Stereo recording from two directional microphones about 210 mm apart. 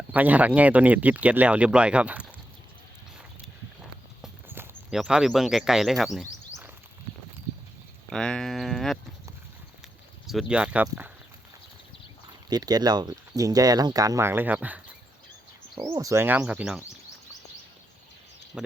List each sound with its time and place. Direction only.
0.1 s speech: 10° right (ahead or behind)
3.8 s walk: 5° right (ahead or behind)
8.1 s speech: 5° left (ahead or behind)
10.2 s speech: 5° right (ahead or behind)
12.5 s speech: 20° right (ahead or behind)
18.5 s speech: 5° right (ahead or behind)